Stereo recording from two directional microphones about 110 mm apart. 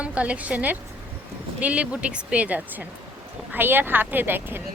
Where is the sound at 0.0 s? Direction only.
10° right (ahead or behind).